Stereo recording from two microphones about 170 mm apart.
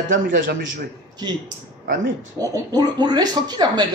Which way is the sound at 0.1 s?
90° right.